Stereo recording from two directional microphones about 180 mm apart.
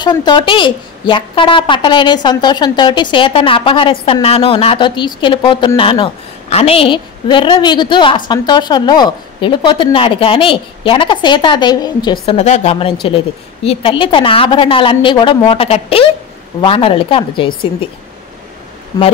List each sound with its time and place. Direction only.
0.0 s a woman's voice: 25° left (ahead or behind)
12.4 s a woman's voice: 40° left (ahead or behind)